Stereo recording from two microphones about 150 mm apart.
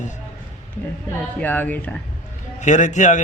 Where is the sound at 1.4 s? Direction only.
10° left (ahead or behind).